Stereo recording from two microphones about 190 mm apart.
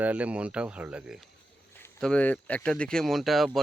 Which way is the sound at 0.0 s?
5° right (ahead or behind).